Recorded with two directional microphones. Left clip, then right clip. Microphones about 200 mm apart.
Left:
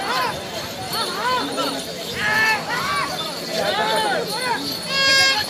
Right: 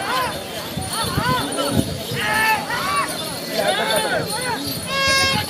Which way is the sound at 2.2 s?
Centre (ahead or behind).